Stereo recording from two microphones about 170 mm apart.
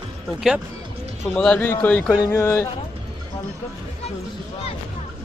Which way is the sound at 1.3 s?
10° left (ahead or behind).